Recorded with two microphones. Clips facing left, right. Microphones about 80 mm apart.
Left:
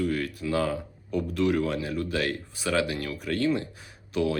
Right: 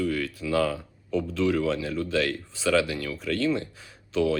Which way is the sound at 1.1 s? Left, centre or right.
Centre.